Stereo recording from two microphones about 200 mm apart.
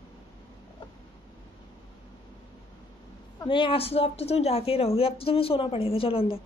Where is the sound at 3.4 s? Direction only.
25° left (ahead or behind).